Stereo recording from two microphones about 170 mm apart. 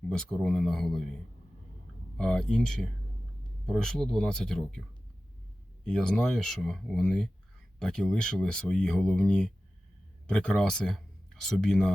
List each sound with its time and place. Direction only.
0.1 s speech: 5° left (ahead or behind)
2.1 s speech: 5° left (ahead or behind)
5.8 s speech: 5° left (ahead or behind)